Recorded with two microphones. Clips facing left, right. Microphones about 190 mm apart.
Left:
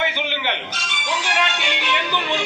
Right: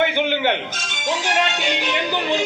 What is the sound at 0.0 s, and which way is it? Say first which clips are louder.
Speech: right 6 dB; 50° right (ahead or behind).